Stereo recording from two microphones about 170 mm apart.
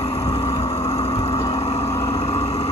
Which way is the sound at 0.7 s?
40° left (ahead or behind).